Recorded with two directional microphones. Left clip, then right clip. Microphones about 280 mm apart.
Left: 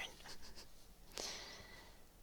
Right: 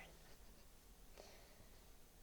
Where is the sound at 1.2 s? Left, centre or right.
Left.